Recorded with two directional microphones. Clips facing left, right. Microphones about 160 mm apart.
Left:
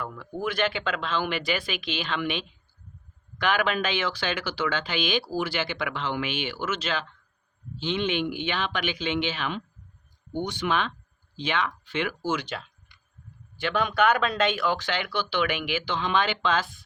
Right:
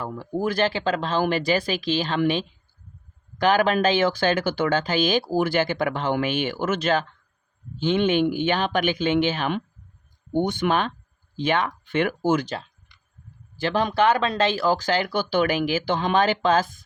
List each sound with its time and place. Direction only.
0.0 s speech: 35° right (ahead or behind)
13.6 s speech: 35° right (ahead or behind)